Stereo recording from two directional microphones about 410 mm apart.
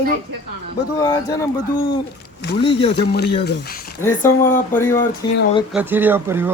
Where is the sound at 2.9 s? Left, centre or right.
Left.